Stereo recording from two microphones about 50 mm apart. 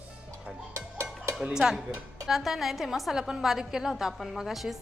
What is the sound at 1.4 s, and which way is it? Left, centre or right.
A woman's voice, centre.